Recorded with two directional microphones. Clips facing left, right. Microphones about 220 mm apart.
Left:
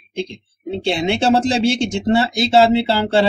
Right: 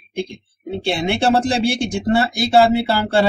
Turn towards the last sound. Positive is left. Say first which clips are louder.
# left 1 dB
turn(degrees=20)  # may be behind; listen again after turning